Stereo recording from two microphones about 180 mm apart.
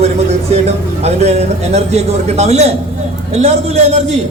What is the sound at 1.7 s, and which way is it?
A man's voice, 35° right (ahead or behind).